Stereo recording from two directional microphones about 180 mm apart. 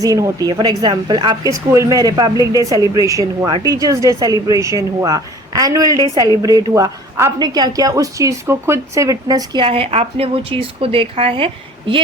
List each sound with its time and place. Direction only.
0.0 s a woman's voice: 20° right (ahead or behind)